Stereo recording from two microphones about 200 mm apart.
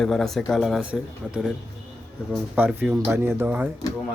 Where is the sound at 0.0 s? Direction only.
Centre (ahead or behind).